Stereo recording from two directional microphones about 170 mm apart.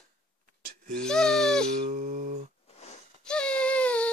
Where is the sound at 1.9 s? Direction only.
45° right (ahead or behind).